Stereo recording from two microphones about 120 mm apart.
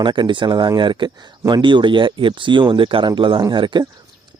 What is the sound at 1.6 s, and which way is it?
Speech, 40° right (ahead or behind).